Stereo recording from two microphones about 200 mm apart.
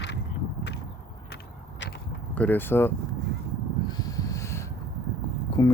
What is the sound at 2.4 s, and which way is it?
Speech, 10° left (ahead or behind).